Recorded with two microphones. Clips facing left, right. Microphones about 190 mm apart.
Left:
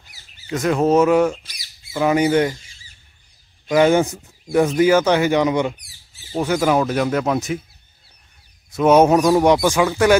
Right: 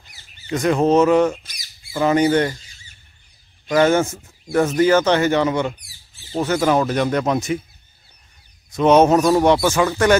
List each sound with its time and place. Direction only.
0.0 s speech: 5° left (ahead or behind)
1.4 s squawk: 45° right (ahead or behind)
2.0 s speech: 10° left (ahead or behind)
3.6 s speech: 10° left (ahead or behind)
8.7 s speech: 10° left (ahead or behind)